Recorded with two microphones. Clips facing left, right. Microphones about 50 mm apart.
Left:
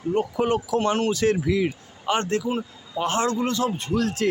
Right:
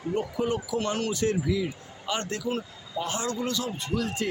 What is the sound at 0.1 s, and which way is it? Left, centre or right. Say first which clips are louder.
Speech: left 5 dB; left.